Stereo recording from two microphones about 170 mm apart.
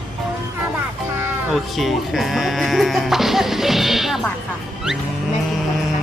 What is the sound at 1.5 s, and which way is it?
Speech, centre (ahead or behind).